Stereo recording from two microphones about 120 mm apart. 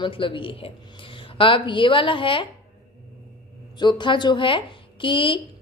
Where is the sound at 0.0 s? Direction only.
45° left (ahead or behind).